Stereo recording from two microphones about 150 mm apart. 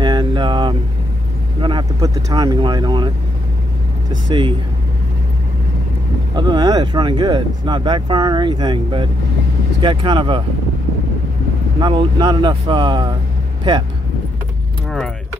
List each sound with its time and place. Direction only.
0.0 s a sound: 30° right (ahead or behind)
1.6 s speech: 30° right (ahead or behind)
4.3 s speech: 35° right (ahead or behind)
6.3 s speech: 30° right (ahead or behind)
11.8 s speech: 30° right (ahead or behind)